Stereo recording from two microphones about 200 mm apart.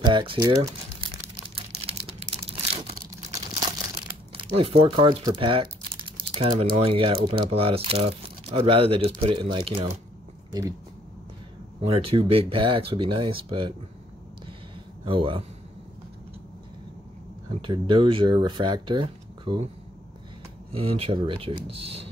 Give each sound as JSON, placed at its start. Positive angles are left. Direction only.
{"t": 0.0, "sound": "speech", "side_deg": -20}
{"t": 0.6, "sound": "crumpling", "side_deg": -30}
{"t": 1.9, "sound": "typing", "side_deg": -30}
{"t": 2.7, "sound": "tearing", "side_deg": -35}
{"t": 4.4, "sound": "speech", "side_deg": -30}
{"t": 11.8, "sound": "speech", "side_deg": -30}
{"t": 15.0, "sound": "speech", "side_deg": -25}
{"t": 17.6, "sound": "speech", "side_deg": -25}
{"t": 20.7, "sound": "speech", "side_deg": -30}